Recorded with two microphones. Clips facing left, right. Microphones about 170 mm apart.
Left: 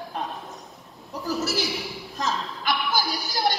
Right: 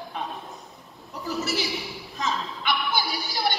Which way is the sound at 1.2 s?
Centre (ahead or behind).